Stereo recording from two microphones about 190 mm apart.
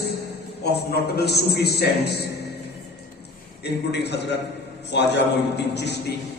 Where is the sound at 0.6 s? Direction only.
60° left (ahead or behind).